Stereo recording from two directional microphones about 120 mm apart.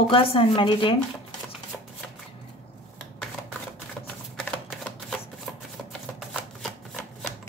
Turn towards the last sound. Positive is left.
turn(degrees=5)  # may be behind; listen again after turning